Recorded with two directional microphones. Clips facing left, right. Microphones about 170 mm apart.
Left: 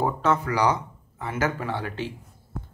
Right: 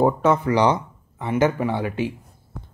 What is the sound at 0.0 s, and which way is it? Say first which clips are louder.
Speech: right 6 dB; 20° right (ahead or behind).